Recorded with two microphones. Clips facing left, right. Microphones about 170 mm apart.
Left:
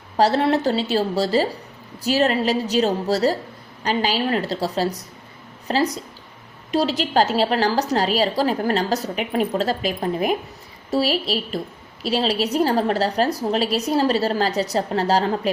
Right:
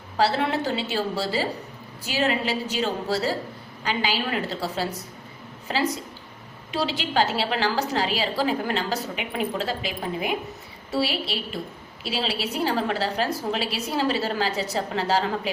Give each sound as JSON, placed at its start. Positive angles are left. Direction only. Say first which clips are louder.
{"t": 0.2, "sound": "a woman's voice", "louder": "left 5 dB", "side_deg": 40}